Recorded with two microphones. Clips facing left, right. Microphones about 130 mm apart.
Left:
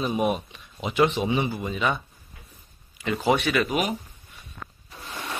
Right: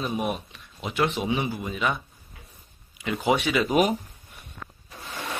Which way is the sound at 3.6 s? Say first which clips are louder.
Right 4 dB; 35° right (ahead or behind).